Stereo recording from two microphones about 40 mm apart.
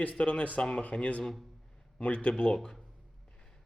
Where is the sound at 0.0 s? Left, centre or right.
Left.